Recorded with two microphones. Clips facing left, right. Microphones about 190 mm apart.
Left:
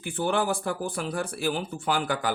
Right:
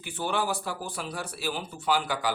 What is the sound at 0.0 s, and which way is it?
Speech, 50° left (ahead or behind).